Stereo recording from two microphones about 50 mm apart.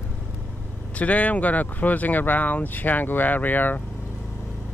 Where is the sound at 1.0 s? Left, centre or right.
Left.